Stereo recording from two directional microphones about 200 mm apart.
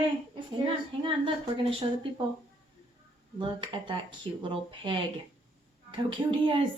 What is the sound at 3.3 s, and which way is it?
Speech, 25° right (ahead or behind).